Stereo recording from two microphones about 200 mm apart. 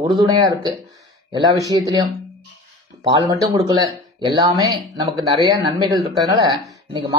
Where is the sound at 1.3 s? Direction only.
20° right (ahead or behind).